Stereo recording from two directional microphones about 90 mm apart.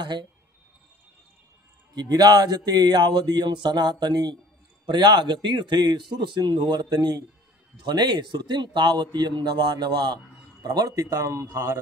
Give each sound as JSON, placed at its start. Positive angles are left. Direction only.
{"t": 0.0, "sound": "speech", "side_deg": -55}
{"t": 2.0, "sound": "a man's voice", "side_deg": -50}
{"t": 11.1, "sound": "speech", "side_deg": -35}